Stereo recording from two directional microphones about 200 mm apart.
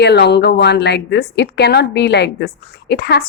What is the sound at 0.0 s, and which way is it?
A woman's voice, 55° left (ahead or behind).